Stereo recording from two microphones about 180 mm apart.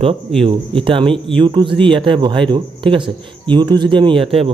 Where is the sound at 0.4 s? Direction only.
30° right (ahead or behind).